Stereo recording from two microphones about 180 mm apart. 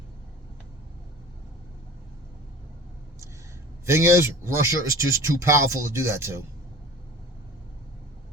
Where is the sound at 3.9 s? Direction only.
15° right (ahead or behind).